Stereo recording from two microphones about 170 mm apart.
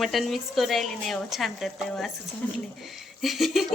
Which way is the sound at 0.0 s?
Centre (ahead or behind).